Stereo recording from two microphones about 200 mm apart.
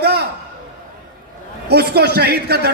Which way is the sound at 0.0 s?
55° right (ahead or behind).